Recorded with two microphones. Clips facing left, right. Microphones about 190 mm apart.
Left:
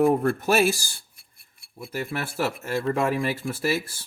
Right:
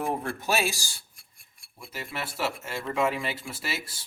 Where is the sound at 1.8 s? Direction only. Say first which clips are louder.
Left 6 dB; 55° left (ahead or behind).